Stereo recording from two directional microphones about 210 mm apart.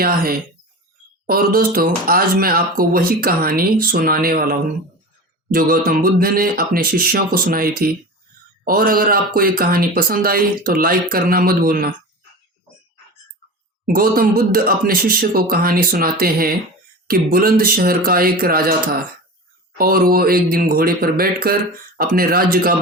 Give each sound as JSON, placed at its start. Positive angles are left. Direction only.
{"t": 0.0, "sound": "speech", "side_deg": -45}
{"t": 13.8, "sound": "speech", "side_deg": -45}